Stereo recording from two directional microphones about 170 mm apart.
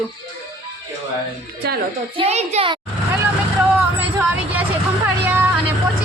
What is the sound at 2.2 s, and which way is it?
Speech, 40° right (ahead or behind).